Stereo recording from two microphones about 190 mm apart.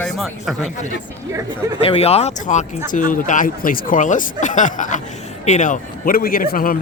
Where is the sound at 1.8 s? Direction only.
30° left (ahead or behind).